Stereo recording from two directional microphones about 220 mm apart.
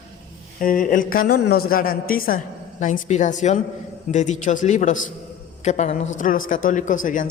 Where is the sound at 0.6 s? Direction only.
40° left (ahead or behind).